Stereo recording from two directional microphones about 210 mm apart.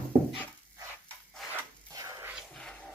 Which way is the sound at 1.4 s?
Centre (ahead or behind).